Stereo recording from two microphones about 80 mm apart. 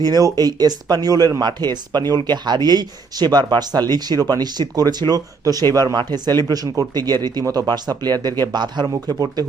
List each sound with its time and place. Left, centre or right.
0.0 s speech: right
8.9 s speech: right